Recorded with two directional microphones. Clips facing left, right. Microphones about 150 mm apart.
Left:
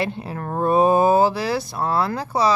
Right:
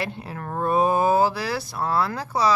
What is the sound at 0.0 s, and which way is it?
Speech, 25° left (ahead or behind).